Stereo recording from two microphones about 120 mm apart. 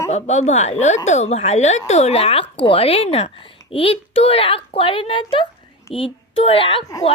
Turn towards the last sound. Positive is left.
turn(degrees=50)  # may be behind; listen again after turning